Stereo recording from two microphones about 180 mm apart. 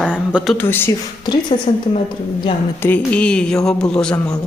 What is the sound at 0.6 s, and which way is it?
Speech, 10° left (ahead or behind).